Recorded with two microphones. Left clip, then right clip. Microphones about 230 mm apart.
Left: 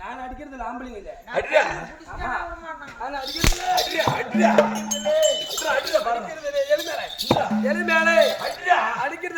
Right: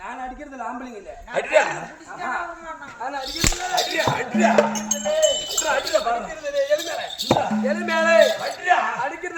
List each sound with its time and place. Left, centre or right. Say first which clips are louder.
1.3 s speech: right 1 dB; centre
3.2 s speech: left 3 dB; centre
6.4 s a man's voice: even; centre
7.7 s speech: right 1 dB; left
8.2 s speech: right 2 dB; centre